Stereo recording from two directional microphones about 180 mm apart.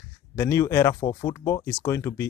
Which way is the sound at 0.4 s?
15° left (ahead or behind).